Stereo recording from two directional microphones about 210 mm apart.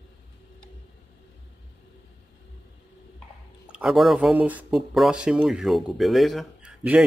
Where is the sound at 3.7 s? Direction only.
Centre (ahead or behind).